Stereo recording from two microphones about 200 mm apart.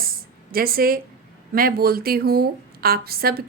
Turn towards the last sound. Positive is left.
turn(degrees=-50)  # may be behind; listen again after turning